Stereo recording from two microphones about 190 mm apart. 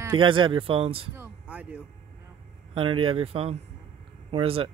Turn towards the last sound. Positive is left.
turn(degrees=-30)  # may be behind; listen again after turning